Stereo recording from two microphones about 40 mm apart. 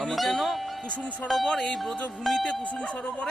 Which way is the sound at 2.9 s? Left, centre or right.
Left.